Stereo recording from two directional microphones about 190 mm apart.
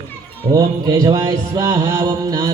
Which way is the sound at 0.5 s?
20° right (ahead or behind).